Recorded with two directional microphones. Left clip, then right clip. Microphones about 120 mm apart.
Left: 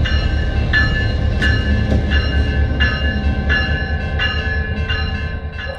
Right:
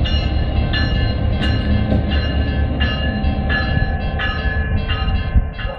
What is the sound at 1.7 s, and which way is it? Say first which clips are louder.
Train: left 1 dB; 15° left (ahead or behind).